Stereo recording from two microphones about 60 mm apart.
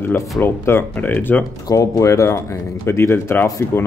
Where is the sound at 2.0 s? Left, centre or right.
Left.